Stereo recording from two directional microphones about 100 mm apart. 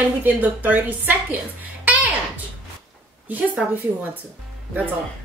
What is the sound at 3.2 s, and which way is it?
Speech, 15° right (ahead or behind).